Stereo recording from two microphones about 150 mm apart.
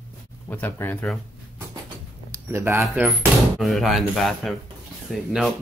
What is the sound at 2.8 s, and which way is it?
Speech, 10° right (ahead or behind).